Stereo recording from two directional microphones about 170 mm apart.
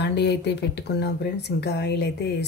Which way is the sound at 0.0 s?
90° left.